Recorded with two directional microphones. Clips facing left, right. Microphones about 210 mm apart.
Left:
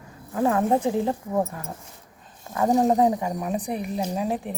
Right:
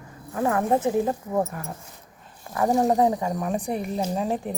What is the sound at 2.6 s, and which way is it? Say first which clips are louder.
Speech: left 1 dB; 20° left (ahead or behind).